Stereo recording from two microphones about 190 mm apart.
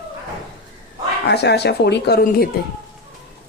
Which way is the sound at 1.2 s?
60° left (ahead or behind).